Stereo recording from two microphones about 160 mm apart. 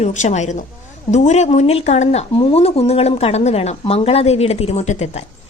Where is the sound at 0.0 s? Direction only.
45° left (ahead or behind).